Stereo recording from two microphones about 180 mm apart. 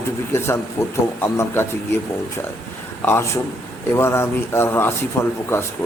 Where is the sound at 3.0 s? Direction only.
15° left (ahead or behind).